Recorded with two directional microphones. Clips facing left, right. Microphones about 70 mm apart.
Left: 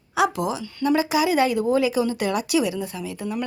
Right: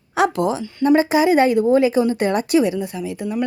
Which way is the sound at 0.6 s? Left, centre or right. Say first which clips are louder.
Right 6 dB; right.